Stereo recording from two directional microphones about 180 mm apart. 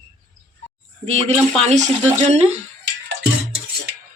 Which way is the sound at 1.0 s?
35° right (ahead or behind).